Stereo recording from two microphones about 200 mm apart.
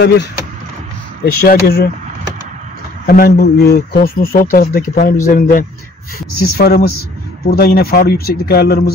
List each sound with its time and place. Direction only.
1.2 s speech: 50° left (ahead or behind)
3.2 s speech: 50° left (ahead or behind)